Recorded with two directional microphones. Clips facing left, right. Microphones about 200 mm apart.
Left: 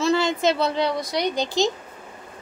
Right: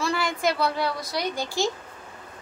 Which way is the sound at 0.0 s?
25° left (ahead or behind).